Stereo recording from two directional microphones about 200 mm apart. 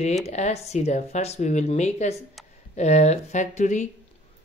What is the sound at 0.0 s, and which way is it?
Speech, 35° left (ahead or behind).